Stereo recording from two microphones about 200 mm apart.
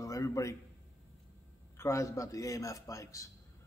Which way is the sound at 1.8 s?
15° left (ahead or behind).